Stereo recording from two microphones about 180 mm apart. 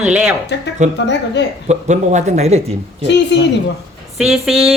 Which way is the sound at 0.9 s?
75° left (ahead or behind).